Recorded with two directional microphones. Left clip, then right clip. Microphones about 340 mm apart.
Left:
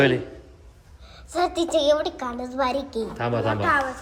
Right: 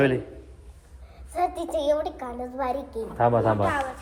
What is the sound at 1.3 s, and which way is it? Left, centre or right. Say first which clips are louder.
A child's voice: left 4 dB; left.